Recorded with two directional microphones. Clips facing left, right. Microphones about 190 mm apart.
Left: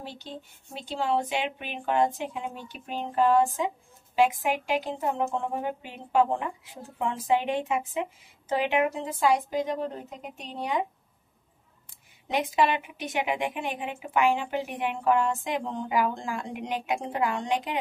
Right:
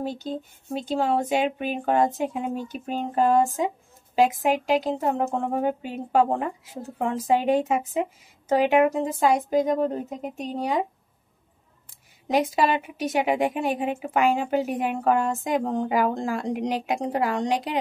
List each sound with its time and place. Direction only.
0.0 s speech: 45° right (ahead or behind)
12.3 s speech: 40° right (ahead or behind)